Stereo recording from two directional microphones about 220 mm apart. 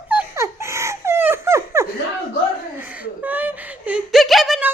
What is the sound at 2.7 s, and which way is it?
Whimper, 5° right (ahead or behind).